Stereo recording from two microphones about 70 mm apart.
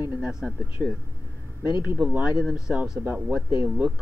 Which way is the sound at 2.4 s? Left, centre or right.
Centre.